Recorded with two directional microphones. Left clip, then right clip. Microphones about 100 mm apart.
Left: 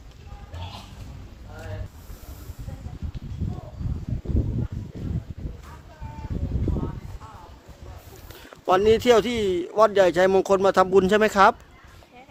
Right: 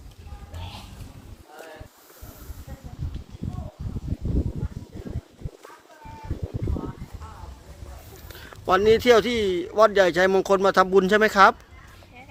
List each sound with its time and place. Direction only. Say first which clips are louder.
8.4 s speech: even; 35° left (ahead or behind)